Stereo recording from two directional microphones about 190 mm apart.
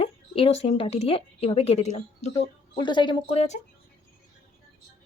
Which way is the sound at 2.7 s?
25° left (ahead or behind).